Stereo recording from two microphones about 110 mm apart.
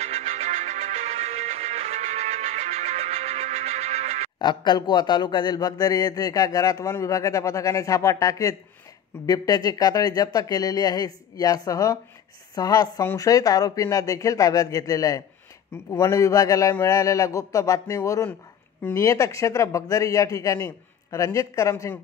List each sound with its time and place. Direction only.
0.0 s music: 70° right (ahead or behind)
4.4 s speech: 40° left (ahead or behind)